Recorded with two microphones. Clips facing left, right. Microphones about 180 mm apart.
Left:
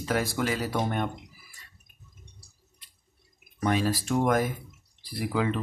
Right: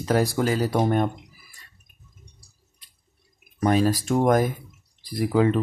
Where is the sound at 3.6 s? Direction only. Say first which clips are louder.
Right 5 dB; 40° right (ahead or behind).